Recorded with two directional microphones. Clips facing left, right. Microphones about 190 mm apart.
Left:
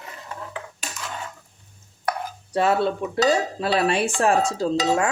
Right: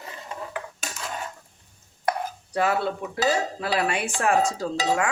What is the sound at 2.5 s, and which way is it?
Speech, 30° left (ahead or behind).